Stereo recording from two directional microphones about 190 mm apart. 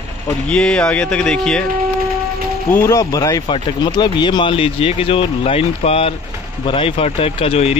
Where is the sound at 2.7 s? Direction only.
15° left (ahead or behind).